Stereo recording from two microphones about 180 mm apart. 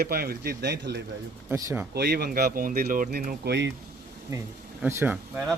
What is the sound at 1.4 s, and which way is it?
Speech, 15° right (ahead or behind).